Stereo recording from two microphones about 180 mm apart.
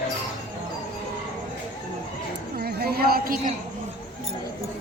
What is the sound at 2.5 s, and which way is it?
Chatter, 60° right (ahead or behind).